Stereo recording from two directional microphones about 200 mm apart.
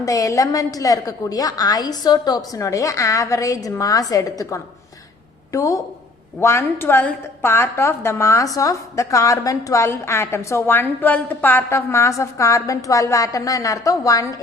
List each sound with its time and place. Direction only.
0.0 s a woman's voice: 15° left (ahead or behind)